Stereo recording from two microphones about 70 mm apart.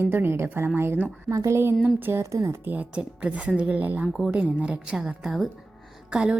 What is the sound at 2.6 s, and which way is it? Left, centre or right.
Speech, right.